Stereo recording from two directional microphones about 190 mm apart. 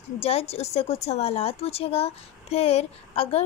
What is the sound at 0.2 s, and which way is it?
A woman's voice, 30° left (ahead or behind).